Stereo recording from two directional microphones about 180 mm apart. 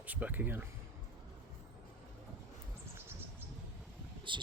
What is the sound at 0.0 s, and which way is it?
Speech, 10° right (ahead or behind).